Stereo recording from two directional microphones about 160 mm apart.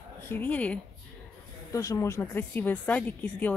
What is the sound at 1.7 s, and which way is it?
A woman's voice, 20° left (ahead or behind).